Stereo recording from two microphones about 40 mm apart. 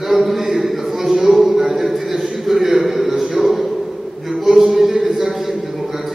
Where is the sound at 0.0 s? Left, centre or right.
Centre.